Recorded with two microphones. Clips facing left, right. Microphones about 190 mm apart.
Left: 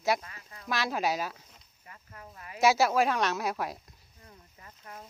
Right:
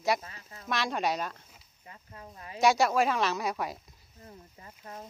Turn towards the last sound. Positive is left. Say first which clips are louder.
# right 3 dB
turn(degrees=-30)  # may be behind; listen again after turning